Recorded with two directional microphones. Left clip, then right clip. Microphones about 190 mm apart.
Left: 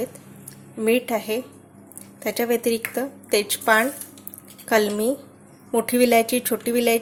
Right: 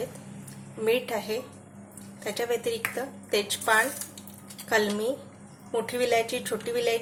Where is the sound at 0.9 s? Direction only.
35° left (ahead or behind).